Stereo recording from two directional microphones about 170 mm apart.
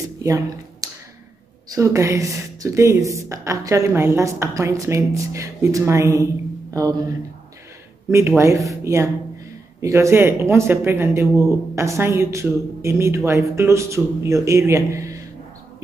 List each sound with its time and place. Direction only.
0.2 s a sound: 20° right (ahead or behind)
1.8 s speech: 15° right (ahead or behind)
8.1 s speech: 15° right (ahead or behind)